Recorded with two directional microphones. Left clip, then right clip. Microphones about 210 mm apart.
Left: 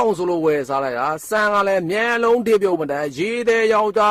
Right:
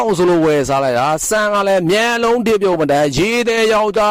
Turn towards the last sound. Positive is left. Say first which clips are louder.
# right 3 dB
turn(degrees=-45)  # may be behind; listen again after turning